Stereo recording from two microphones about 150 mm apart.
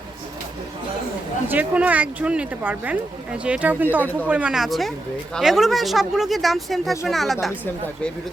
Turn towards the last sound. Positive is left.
turn(degrees=0)  # may be behind; listen again after turning